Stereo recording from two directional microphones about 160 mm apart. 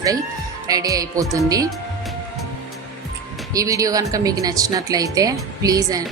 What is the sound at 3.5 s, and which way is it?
Speech, 20° right (ahead or behind).